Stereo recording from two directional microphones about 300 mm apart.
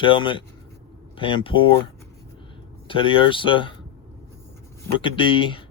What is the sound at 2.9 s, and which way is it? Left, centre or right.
Speech, centre.